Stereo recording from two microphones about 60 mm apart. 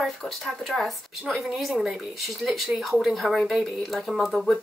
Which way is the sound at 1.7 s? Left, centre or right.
Centre.